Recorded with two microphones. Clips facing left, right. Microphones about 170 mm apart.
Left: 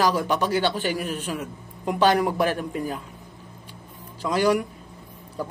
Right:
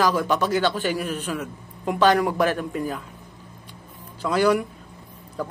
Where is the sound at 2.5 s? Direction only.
40° right (ahead or behind).